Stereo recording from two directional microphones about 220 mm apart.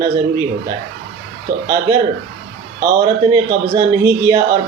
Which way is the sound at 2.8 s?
15° right (ahead or behind).